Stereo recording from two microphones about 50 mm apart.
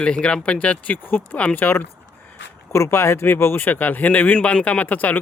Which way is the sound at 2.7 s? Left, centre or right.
Left.